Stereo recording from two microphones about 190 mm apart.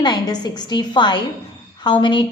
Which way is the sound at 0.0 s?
20° left (ahead or behind).